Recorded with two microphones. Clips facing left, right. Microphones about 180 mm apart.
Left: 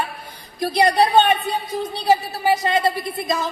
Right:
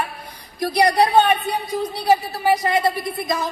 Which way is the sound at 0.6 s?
25° left (ahead or behind).